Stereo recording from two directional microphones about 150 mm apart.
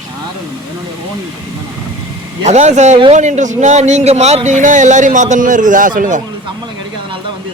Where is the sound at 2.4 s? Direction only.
50° right (ahead or behind).